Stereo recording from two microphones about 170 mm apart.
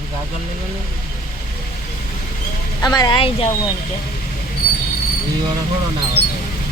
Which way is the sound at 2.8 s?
25° left (ahead or behind).